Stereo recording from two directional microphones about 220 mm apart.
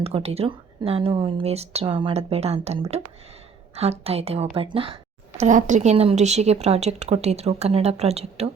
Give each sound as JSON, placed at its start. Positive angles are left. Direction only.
{"t": 0.0, "sound": "a woman's voice", "side_deg": -25}
{"t": 5.4, "sound": "a woman's voice", "side_deg": -35}